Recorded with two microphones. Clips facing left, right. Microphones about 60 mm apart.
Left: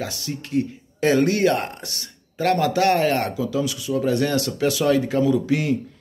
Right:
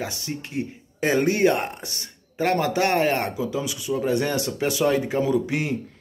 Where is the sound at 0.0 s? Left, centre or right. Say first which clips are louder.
Left 1 dB; right.